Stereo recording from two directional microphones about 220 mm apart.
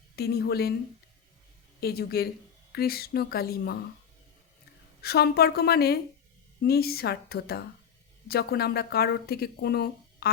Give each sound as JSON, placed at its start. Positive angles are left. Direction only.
{"t": 0.2, "sound": "speech", "side_deg": 45}
{"t": 1.8, "sound": "speech", "side_deg": 45}
{"t": 5.0, "sound": "speech", "side_deg": 45}